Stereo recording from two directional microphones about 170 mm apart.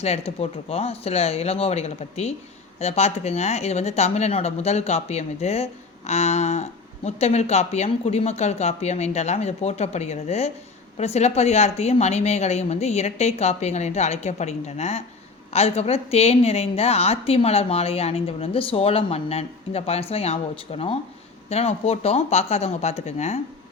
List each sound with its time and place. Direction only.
0.0 s a woman's voice: 35° left (ahead or behind)